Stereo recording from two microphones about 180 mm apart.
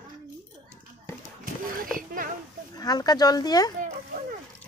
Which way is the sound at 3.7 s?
45° right (ahead or behind).